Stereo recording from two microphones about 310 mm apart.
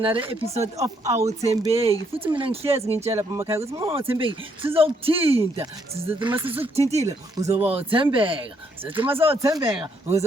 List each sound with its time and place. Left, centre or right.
0.0 s speech: centre